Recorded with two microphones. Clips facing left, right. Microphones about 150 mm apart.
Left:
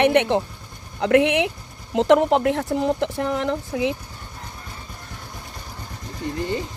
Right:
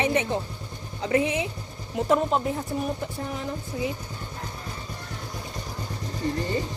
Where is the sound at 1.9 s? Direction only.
90° left.